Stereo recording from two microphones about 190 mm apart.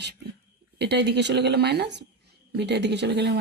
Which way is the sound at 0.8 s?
60° right (ahead or behind).